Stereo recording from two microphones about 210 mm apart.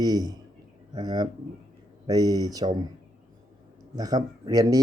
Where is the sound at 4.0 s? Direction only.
20° right (ahead or behind).